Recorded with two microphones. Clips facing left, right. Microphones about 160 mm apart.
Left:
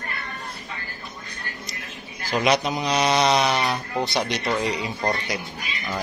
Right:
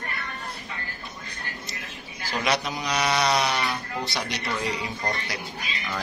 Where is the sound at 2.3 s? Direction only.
20° left (ahead or behind).